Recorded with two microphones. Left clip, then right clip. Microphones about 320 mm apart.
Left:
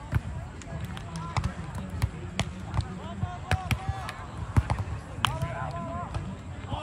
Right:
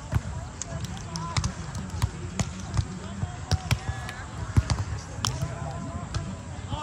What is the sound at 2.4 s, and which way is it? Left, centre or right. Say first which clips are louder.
Basketball bounce: left 1 dB; left.